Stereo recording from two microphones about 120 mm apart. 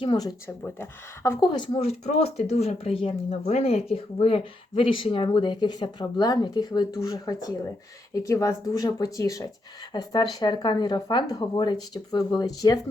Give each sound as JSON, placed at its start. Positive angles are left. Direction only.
{"t": 0.0, "sound": "speech", "side_deg": 40}
{"t": 0.4, "sound": "speech", "side_deg": 20}
{"t": 1.4, "sound": "speech", "side_deg": 40}
{"t": 3.4, "sound": "speech", "side_deg": 65}